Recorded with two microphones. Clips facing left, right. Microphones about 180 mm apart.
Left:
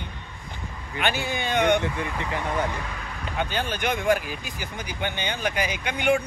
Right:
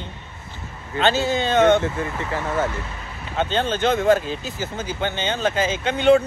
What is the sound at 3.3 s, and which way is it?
Speech, 25° right (ahead or behind).